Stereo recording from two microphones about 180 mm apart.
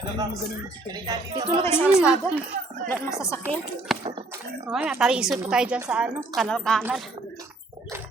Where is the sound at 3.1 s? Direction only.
15° left (ahead or behind).